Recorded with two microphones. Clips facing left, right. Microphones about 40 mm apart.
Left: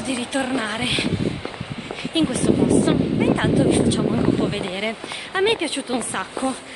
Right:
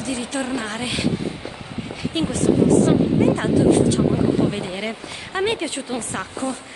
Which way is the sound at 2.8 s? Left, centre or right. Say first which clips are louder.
Right 2 dB; left.